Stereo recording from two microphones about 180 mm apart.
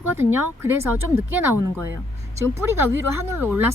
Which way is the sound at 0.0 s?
10° right (ahead or behind).